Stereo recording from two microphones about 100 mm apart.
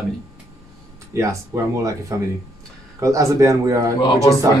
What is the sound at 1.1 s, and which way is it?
Speech, 30° right (ahead or behind).